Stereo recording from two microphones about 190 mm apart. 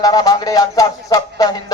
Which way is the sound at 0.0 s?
20° left (ahead or behind).